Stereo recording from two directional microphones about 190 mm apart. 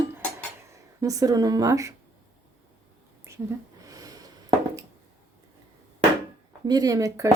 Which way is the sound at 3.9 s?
20° right (ahead or behind).